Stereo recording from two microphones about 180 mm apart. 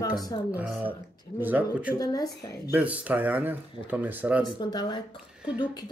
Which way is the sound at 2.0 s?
20° left (ahead or behind).